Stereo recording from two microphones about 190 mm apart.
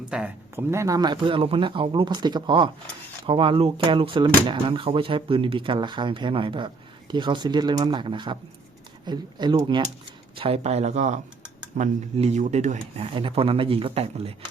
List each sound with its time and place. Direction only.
0.1 s speech: 10° right (ahead or behind); by 14.3 s 30° right (ahead or behind)